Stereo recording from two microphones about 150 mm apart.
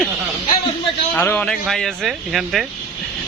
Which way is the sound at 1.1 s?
10° left (ahead or behind).